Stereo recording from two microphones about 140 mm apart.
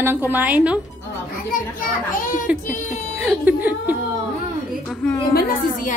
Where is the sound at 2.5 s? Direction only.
10° right (ahead or behind).